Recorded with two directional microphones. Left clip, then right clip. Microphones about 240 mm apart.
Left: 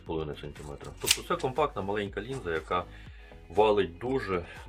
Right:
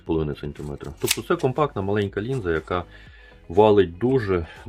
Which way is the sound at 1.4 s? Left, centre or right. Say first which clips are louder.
Right 5 dB; right.